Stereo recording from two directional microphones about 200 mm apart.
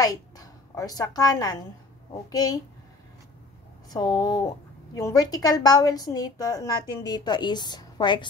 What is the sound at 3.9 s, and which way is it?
A woman's voice, 20° left (ahead or behind).